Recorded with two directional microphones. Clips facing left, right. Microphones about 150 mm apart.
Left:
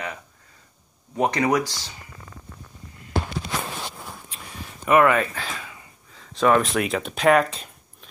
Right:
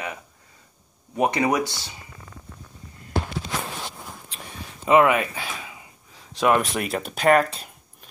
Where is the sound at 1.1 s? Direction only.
10° right (ahead or behind).